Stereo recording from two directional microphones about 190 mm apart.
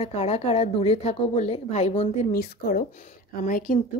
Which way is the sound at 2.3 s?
55° left (ahead or behind).